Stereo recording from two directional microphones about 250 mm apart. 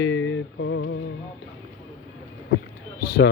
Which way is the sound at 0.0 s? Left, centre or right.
Left.